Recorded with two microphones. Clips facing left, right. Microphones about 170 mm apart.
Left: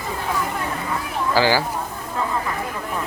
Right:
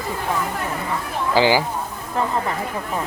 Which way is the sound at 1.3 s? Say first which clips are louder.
Right 2 dB; 20° right (ahead or behind).